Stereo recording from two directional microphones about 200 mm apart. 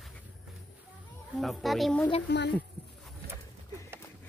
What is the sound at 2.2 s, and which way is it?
Speech, 60° left (ahead or behind).